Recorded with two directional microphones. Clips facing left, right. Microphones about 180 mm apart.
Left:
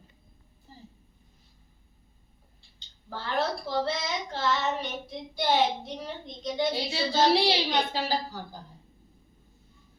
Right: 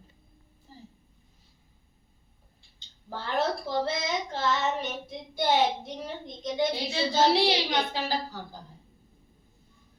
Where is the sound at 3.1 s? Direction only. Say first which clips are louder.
Right 1 dB; 20° right (ahead or behind).